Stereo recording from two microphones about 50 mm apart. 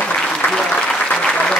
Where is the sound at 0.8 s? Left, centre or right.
Left.